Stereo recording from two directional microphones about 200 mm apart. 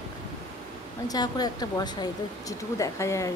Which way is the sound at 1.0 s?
20° left (ahead or behind).